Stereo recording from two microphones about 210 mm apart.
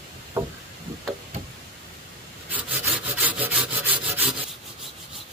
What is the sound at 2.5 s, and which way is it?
Wood, 5° right (ahead or behind).